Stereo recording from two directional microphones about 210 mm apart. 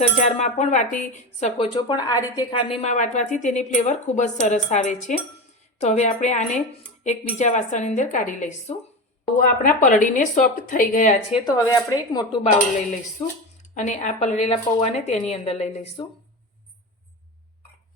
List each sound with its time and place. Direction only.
0.0 s speech: 30° left (ahead or behind)
11.4 s a woman's voice: 15° left (ahead or behind)
12.4 s speech: 35° left (ahead or behind)